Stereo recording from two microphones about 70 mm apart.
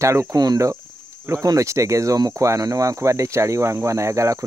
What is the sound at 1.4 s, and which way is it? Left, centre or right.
Speech, right.